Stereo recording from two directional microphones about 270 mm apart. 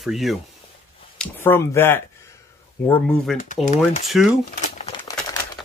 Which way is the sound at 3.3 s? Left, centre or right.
Left.